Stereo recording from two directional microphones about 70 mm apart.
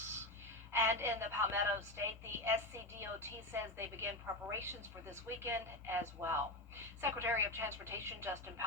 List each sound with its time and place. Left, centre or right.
0.7 s a woman's voice: right